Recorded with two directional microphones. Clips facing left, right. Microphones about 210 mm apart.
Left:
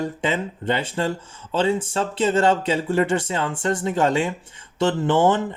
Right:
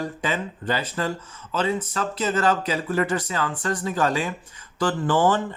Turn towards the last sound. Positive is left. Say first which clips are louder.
# left 2 dB
turn(degrees=20)  # may be behind; listen again after turning